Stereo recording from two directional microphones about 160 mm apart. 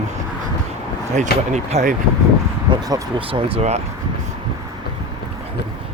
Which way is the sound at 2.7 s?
30° right (ahead or behind).